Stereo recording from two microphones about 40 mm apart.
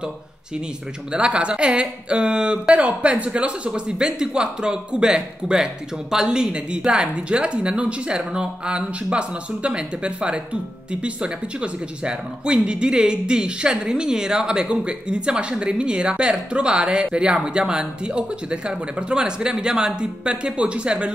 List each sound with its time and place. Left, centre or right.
1.1 s speech: right
2.8 s speech: right